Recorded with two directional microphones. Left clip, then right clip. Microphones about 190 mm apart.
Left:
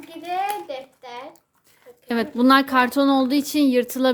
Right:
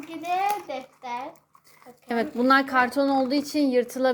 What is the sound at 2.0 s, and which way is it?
A woman's voice, 25° left (ahead or behind).